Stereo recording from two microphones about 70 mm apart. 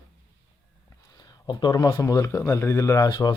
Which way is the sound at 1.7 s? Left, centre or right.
Left.